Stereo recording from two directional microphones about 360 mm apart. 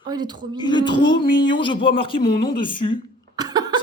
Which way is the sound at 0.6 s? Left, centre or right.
Centre.